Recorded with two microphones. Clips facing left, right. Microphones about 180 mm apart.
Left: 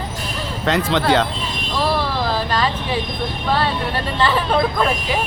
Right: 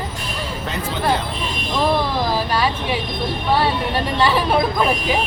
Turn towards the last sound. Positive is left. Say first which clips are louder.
# right 1 dB
turn(degrees=-10)  # may be behind; listen again after turning